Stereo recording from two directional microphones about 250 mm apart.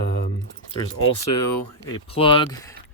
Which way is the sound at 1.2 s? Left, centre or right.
Left.